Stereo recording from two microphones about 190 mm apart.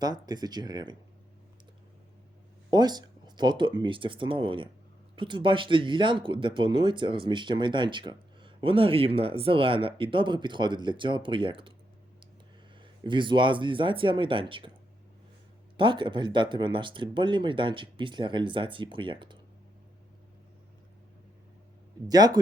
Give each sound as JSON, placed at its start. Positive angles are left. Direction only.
{"t": 0.0, "sound": "speech", "side_deg": -20}
{"t": 2.6, "sound": "speech", "side_deg": -20}
{"t": 12.8, "sound": "speech", "side_deg": -25}
{"t": 15.8, "sound": "speech", "side_deg": -25}
{"t": 22.0, "sound": "speech", "side_deg": -20}